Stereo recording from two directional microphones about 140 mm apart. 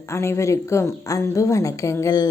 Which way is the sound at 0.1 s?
20° left (ahead or behind).